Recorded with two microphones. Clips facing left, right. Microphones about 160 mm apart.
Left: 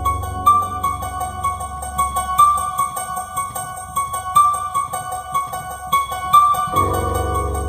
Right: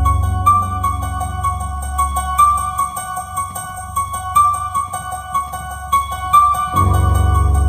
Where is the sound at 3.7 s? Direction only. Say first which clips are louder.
Right 1 dB; 35° left (ahead or behind).